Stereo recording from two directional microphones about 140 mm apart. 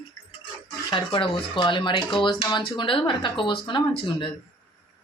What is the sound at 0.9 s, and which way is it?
Speech, 35° left (ahead or behind).